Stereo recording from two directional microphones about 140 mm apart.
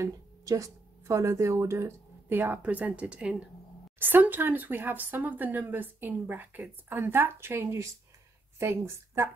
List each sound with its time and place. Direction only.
0.0 s speech: 25° right (ahead or behind)